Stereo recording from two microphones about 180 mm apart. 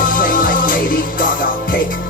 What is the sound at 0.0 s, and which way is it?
Music, 50° left (ahead or behind).